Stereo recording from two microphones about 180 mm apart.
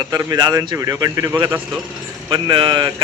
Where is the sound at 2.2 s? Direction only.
25° right (ahead or behind).